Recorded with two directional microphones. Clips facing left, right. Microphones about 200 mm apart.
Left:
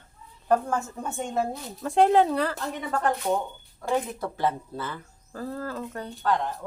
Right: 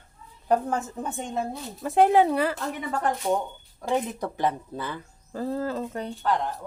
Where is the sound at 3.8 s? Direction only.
15° right (ahead or behind).